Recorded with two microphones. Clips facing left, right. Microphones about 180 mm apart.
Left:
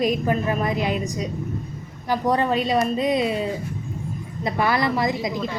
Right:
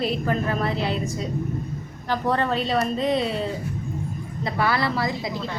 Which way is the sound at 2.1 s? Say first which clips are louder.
Left 2 dB; 15° left (ahead or behind).